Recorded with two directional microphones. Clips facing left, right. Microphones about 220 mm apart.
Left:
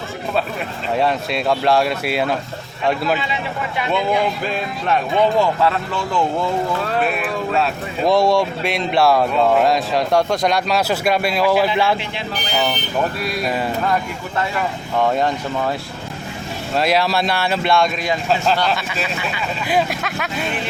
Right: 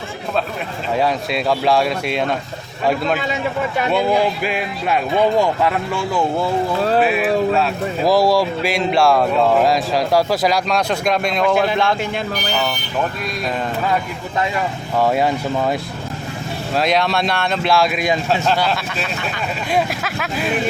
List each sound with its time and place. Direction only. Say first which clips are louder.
0.9 s speech: even; centre (ahead or behind)
3.2 s a man's voice: right 4 dB; 45° right (ahead or behind)
4.4 s speech: right 1 dB; 10° right (ahead or behind)
14.9 s speech: right 1 dB; 5° right (ahead or behind)
16.7 s speech: even; centre (ahead or behind)
17.9 s speech: right 3 dB; 15° right (ahead or behind)
18.3 s speech: even; centre (ahead or behind)